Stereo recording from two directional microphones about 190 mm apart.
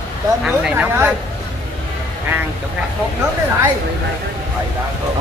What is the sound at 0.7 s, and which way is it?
Speech, 10° right (ahead or behind).